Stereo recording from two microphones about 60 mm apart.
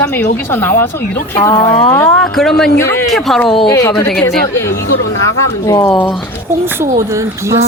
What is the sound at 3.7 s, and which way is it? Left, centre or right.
Speech, left.